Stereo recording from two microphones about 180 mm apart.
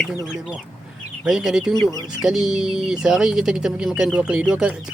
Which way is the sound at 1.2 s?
5° right (ahead or behind).